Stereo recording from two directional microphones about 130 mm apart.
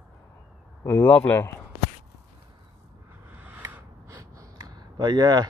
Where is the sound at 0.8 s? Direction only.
15° left (ahead or behind).